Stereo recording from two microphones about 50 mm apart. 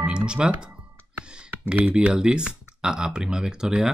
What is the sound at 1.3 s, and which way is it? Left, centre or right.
Computer keyboard, centre.